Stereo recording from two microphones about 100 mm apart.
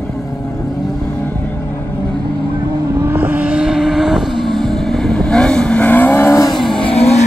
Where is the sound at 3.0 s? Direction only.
15° right (ahead or behind); by 6.4 s 25° left (ahead or behind).